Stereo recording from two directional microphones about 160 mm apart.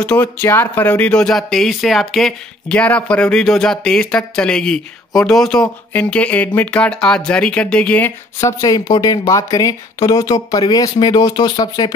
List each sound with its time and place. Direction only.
0.0 s speech: 10° left (ahead or behind)
8.4 s speech: 20° left (ahead or behind)